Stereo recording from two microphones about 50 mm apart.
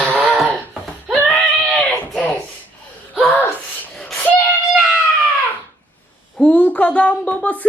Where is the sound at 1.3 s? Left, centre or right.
Centre.